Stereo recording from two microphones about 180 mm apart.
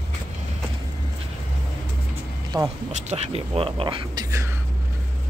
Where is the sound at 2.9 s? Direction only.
35° right (ahead or behind); by 4.5 s 20° right (ahead or behind).